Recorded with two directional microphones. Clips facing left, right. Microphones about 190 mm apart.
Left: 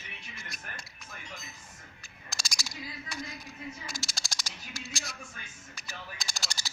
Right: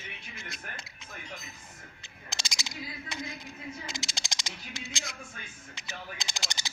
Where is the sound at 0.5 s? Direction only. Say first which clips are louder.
Right 2 dB; 25° right (ahead or behind).